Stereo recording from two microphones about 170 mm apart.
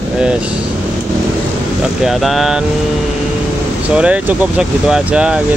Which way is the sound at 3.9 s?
10° right (ahead or behind).